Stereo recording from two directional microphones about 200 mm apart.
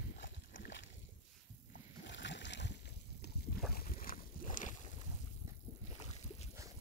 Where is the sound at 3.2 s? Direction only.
55° left (ahead or behind).